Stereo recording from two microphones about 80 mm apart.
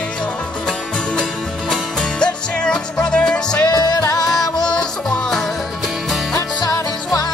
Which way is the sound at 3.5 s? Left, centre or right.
Left.